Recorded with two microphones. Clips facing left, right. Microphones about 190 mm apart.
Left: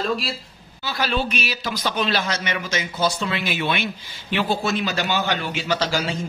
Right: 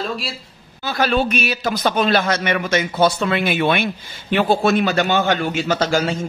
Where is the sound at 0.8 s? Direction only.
50° right (ahead or behind).